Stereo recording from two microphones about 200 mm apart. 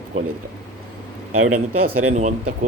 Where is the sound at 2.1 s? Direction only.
35° right (ahead or behind).